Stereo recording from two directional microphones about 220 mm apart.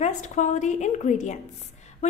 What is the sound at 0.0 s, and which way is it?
Speech, 35° left (ahead or behind).